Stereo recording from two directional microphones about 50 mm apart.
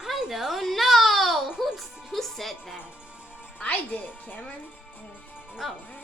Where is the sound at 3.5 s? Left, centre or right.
Left.